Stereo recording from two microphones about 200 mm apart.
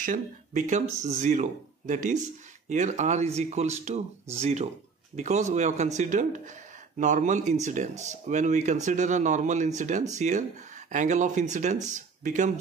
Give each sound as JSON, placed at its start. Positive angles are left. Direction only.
{"t": 0.0, "sound": "speech", "side_deg": -40}